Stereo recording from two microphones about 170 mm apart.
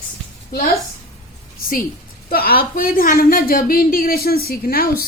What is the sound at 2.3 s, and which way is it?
A woman's voice, 60° left (ahead or behind).